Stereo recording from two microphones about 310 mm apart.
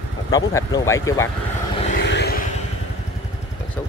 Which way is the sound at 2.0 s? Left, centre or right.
Left.